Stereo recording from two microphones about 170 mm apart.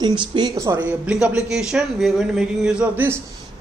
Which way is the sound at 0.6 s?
15° right (ahead or behind).